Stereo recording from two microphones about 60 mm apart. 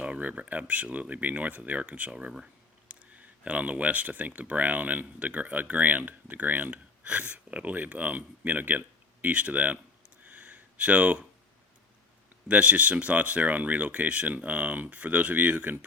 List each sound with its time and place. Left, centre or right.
0.0 s speech: right
2.1 s speech: centre
10.2 s a sound: right
12.5 s speech: right